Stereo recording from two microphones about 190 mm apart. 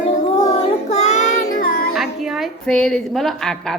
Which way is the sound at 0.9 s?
35° left (ahead or behind).